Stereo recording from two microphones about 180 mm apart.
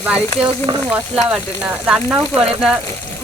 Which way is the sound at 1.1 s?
5° right (ahead or behind).